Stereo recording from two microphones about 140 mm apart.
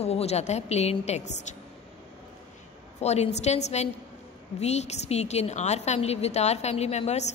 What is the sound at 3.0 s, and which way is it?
A woman's voice, 50° left (ahead or behind).